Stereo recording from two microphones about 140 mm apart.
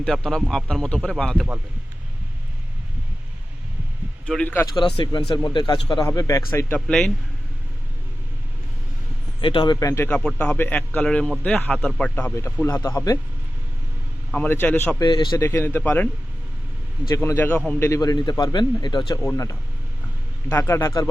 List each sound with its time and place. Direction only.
0.0 s speech: 5° left (ahead or behind)
4.3 s a man's voice: 10° left (ahead or behind)
4.7 s a man's voice: 35° left (ahead or behind)
6.1 s a man's voice: 20° left (ahead or behind); by 7.1 s 5° left (ahead or behind)
9.4 s a man's voice: 35° left (ahead or behind)
9.8 s a man's voice: 20° left (ahead or behind)
10.1 s a man's voice: 5° left (ahead or behind)
12.1 s a man's voice: 15° left (ahead or behind)
14.3 s a man's voice: 10° left (ahead or behind)
14.9 s a man's voice: 30° left (ahead or behind)
15.4 s a man's voice: 20° left (ahead or behind)
17.2 s a man's voice: 15° left (ahead or behind)